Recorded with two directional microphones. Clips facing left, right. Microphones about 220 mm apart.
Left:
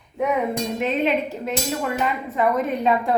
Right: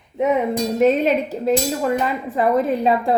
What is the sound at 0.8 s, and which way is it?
A woman's voice, 40° right (ahead or behind).